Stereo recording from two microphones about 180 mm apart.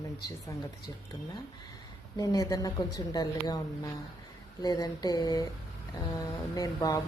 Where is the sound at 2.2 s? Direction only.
20° left (ahead or behind).